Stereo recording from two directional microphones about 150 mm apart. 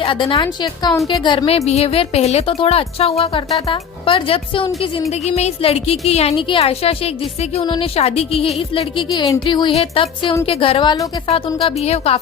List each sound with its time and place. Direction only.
0.0 s a woman's voice: 35° left (ahead or behind)
1.5 s a woman's voice: 45° left (ahead or behind)
5.1 s a woman's voice: 45° left (ahead or behind)
9.0 s speech: 25° left (ahead or behind)
11.3 s a woman's voice: 45° left (ahead or behind)